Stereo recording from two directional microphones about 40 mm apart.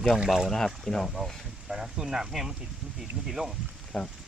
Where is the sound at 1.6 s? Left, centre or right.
Centre.